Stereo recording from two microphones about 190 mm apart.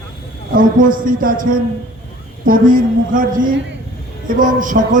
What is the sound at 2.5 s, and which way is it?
A man's voice, 45° right (ahead or behind).